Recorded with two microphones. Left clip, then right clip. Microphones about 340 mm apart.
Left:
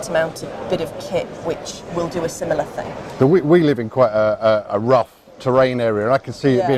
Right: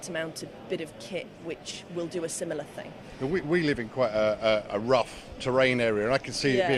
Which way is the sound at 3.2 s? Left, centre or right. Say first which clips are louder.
Left 14 dB; left.